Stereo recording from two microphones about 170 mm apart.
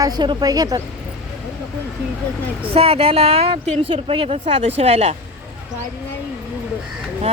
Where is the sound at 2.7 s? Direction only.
35° right (ahead or behind).